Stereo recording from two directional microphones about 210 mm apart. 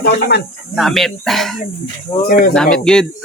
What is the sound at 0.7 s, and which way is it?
Speech, centre (ahead or behind).